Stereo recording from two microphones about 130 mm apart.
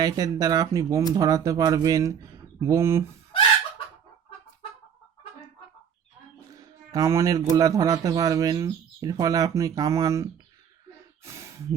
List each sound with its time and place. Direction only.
0.0 s speech: 30° right (ahead or behind)
6.6 s a sound: 25° right (ahead or behind)
7.5 s speech: 30° right (ahead or behind)
11.2 s snort: 20° right (ahead or behind)